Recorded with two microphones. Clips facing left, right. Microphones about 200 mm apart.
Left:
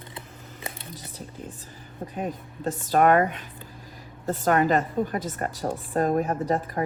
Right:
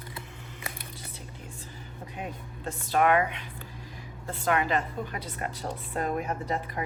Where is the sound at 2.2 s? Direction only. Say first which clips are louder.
Left 7 dB; 40° left (ahead or behind).